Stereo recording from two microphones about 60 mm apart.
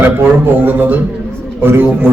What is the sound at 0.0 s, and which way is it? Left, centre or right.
Speech, right.